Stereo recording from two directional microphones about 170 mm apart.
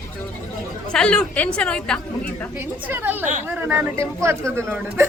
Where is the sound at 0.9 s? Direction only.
5° left (ahead or behind).